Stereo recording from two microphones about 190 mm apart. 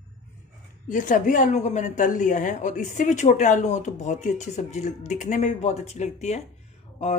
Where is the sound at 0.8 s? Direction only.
40° left (ahead or behind).